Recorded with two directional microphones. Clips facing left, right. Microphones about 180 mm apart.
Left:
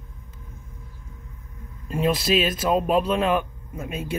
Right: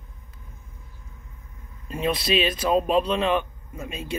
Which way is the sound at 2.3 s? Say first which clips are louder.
Left 1 dB; 50° left (ahead or behind).